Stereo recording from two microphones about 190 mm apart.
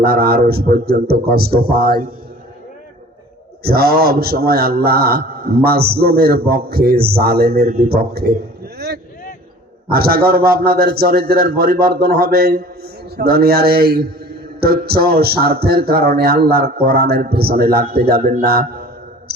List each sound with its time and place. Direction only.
0.0 s a man's voice: 55° right (ahead or behind)
3.6 s a man's voice: 55° right (ahead or behind)
9.9 s a man's voice: 55° right (ahead or behind)